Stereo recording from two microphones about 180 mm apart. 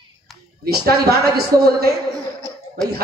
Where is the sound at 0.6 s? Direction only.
60° right (ahead or behind).